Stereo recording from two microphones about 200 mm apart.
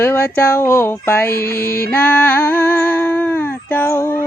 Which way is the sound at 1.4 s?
50° left (ahead or behind).